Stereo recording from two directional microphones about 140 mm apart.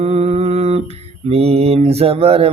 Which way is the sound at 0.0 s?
50° right (ahead or behind).